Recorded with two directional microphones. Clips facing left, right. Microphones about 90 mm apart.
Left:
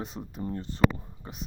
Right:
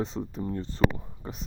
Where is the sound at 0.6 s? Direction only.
30° right (ahead or behind).